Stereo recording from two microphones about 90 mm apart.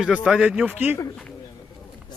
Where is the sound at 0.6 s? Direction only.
20° right (ahead or behind).